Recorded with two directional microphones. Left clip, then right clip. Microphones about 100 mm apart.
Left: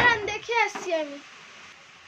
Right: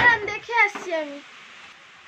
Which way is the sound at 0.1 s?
10° right (ahead or behind).